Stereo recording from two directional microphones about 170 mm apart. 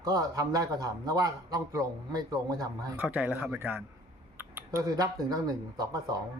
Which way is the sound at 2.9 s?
10° right (ahead or behind).